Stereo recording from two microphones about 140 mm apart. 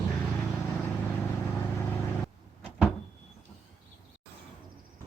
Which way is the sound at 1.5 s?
15° left (ahead or behind).